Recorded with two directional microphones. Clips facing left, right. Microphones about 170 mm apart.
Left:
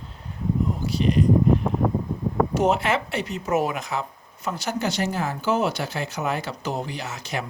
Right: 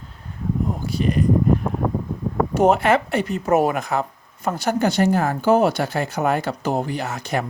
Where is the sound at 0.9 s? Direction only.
50° right (ahead or behind).